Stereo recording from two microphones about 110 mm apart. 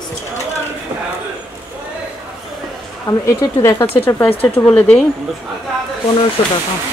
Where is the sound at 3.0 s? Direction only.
30° left (ahead or behind).